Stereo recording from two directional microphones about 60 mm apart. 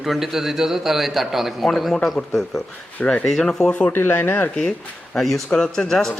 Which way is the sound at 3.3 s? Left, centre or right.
Centre.